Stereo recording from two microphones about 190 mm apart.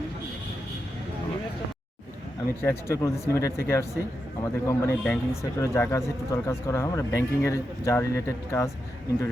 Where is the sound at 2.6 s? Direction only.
15° left (ahead or behind).